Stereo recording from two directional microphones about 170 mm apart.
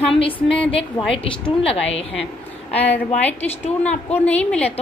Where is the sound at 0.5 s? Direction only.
35° left (ahead or behind).